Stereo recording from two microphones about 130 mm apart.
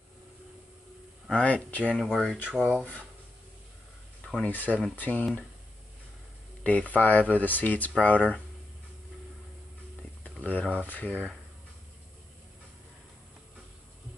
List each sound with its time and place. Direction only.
1.3 s speech: 10° left (ahead or behind)
2.8 s speech: 10° left (ahead or behind)
4.2 s speech: 10° left (ahead or behind)
6.6 s speech: 10° left (ahead or behind)
10.2 s speech: 10° left (ahead or behind)